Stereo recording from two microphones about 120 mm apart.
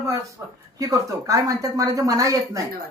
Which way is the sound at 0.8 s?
30° right (ahead or behind).